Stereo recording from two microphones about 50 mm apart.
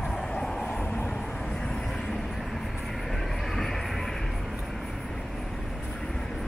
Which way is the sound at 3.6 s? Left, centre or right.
Centre.